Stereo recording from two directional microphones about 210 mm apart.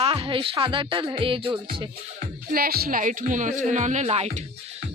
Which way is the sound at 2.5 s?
45° right (ahead or behind).